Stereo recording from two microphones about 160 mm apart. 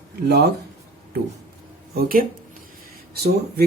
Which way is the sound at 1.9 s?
70° right (ahead or behind).